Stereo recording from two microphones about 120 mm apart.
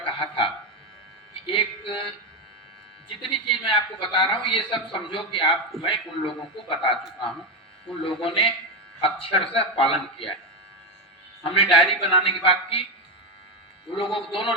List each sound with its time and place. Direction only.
0.0 s music: 45° left (ahead or behind)
3.1 s speech: 45° left (ahead or behind)
8.0 s speech: 50° left (ahead or behind)
11.5 s speech: 50° left (ahead or behind)
13.9 s speech: 45° left (ahead or behind)